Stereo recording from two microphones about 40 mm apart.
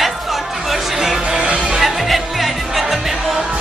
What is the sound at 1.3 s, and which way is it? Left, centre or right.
Music, right.